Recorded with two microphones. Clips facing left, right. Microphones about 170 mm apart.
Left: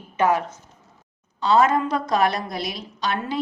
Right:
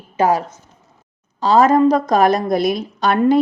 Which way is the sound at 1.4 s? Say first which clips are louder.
Right 6 dB; 40° right (ahead or behind).